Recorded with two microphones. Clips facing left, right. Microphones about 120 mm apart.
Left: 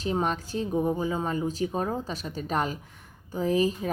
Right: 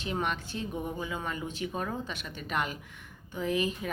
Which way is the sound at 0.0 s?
35° left (ahead or behind).